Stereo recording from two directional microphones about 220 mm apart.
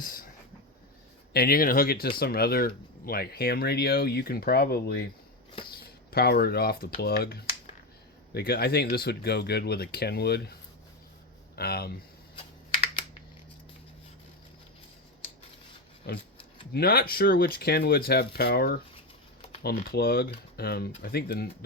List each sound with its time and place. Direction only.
1.3 s speech: 45° left (ahead or behind)
6.1 s speech: 45° left (ahead or behind)
11.5 s speech: 45° left (ahead or behind)
16.1 s speech: 45° left (ahead or behind)